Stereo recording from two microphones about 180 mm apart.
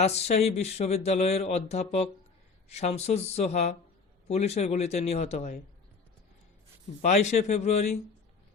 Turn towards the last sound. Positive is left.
turn(degrees=35)  # may be behind; listen again after turning